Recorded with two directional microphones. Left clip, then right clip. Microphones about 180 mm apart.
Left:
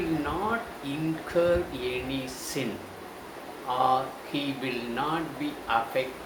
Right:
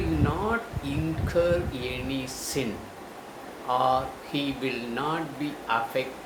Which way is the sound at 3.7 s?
20° right (ahead or behind).